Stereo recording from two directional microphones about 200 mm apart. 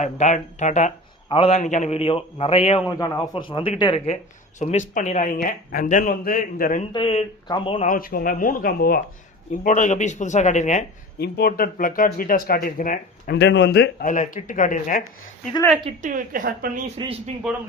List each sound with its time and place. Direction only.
0.0 s a man's voice: 35° left (ahead or behind)
4.6 s a man's voice: 35° left (ahead or behind)
6.9 s a man's voice: 30° left (ahead or behind)
7.9 s a man's voice: 45° left (ahead or behind)
11.2 s speech: 50° left (ahead or behind)
13.3 s speech: 60° left (ahead or behind)
14.0 s a man's voice: 40° left (ahead or behind)
15.8 s a woman's voice: 35° right (ahead or behind)
17.0 s speech: 30° right (ahead or behind)